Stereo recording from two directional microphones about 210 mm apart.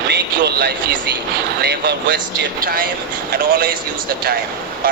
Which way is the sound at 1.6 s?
50° right (ahead or behind).